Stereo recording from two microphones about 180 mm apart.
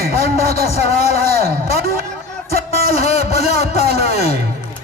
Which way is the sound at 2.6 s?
35° left (ahead or behind).